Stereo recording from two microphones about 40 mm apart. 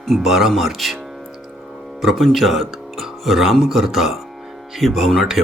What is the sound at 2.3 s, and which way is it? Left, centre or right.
Speech, centre.